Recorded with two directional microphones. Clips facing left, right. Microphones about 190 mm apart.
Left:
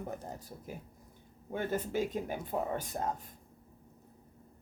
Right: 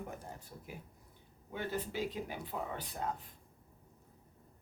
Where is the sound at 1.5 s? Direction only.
50° left (ahead or behind).